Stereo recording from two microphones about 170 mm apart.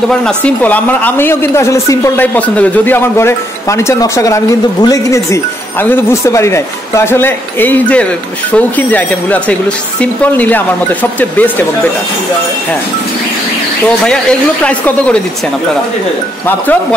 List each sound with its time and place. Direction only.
0.2 s speech: 5° left (ahead or behind)
14.6 s speech: 10° left (ahead or behind)